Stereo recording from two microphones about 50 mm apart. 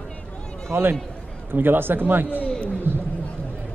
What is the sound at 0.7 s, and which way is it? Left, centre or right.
A man's voice, right.